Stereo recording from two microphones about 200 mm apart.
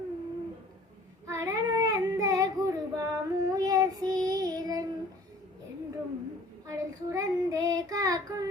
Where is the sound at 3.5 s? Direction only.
20° right (ahead or behind).